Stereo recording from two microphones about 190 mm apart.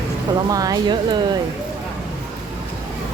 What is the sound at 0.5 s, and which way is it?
Speech, 20° right (ahead or behind).